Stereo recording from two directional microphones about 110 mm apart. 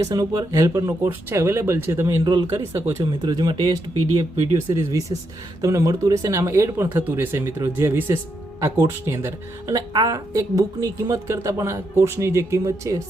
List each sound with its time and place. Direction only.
0.0 s speech: 30° right (ahead or behind)
2.2 s speech: 40° right (ahead or behind)
2.6 s speech: 25° right (ahead or behind)
3.0 s speech: 40° right (ahead or behind)
4.4 s speech: 25° right (ahead or behind)
9.7 s speech: 35° right (ahead or behind)